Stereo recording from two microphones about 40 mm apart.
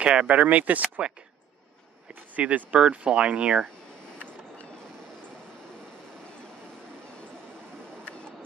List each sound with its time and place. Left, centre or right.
0.0 s speech: right
0.3 s speech: right
2.3 s speech: right